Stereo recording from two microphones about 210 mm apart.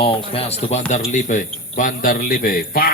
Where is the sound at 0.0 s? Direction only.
25° left (ahead or behind).